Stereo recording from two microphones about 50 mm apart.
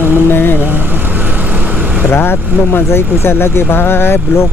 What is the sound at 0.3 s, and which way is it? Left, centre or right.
Vehicle, left.